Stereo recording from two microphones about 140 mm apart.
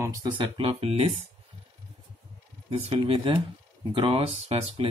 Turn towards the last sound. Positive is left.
turn(degrees=-45)  # may be behind; listen again after turning